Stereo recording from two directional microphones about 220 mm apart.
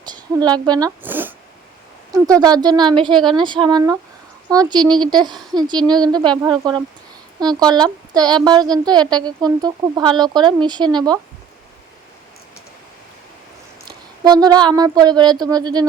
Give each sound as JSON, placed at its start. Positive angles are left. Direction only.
{"t": 0.0, "sound": "a woman's voice", "side_deg": -20}
{"t": 13.8, "sound": "speech", "side_deg": -15}